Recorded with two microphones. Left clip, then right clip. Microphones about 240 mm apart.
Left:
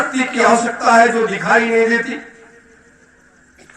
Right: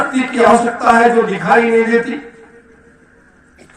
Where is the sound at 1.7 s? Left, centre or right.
Left.